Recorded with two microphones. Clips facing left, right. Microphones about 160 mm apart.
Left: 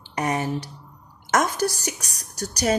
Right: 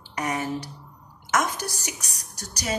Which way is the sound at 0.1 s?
30° left (ahead or behind).